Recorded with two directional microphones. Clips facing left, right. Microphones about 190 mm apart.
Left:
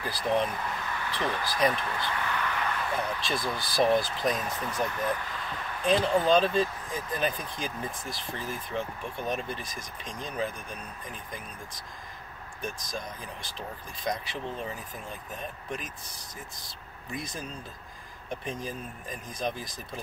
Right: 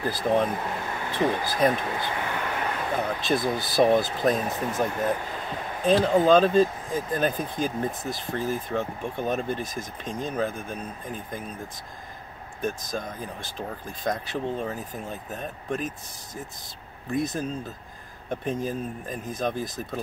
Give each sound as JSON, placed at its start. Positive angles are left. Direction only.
{"t": 0.0, "sound": "speech", "side_deg": -45}
{"t": 2.0, "sound": "vehicle", "side_deg": -50}
{"t": 3.1, "sound": "speech", "side_deg": -45}
{"t": 3.3, "sound": "speech", "side_deg": -20}
{"t": 3.8, "sound": "speech", "side_deg": -50}
{"t": 5.9, "sound": "speech", "side_deg": -20}
{"t": 6.2, "sound": "speech", "side_deg": -45}
{"t": 12.9, "sound": "speech", "side_deg": -45}
{"t": 17.1, "sound": "speech", "side_deg": -45}